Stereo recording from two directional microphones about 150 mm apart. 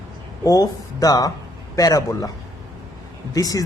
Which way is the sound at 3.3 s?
25° left (ahead or behind).